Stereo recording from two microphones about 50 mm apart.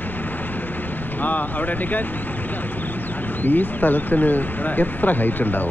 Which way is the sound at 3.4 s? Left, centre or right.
Left.